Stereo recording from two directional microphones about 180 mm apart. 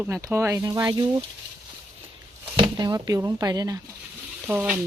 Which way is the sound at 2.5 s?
25° right (ahead or behind).